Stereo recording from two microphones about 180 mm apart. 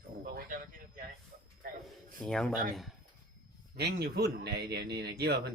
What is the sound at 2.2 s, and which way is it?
Speech, 5° left (ahead or behind).